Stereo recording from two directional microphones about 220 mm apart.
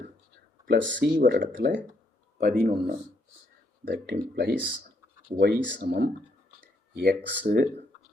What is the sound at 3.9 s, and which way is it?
Speech, 45° right (ahead or behind).